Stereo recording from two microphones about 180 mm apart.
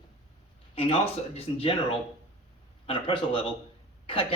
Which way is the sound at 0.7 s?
30° left (ahead or behind).